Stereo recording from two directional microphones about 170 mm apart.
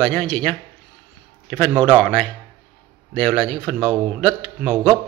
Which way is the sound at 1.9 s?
10° left (ahead or behind).